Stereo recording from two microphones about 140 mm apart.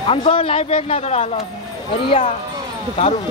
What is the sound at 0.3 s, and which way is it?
Speech, 40° left (ahead or behind).